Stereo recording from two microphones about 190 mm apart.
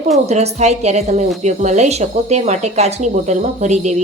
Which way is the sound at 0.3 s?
35° right (ahead or behind).